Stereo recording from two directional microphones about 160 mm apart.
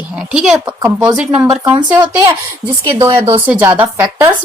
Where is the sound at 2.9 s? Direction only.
15° right (ahead or behind).